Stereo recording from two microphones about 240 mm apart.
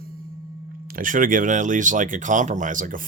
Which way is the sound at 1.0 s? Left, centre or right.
Right.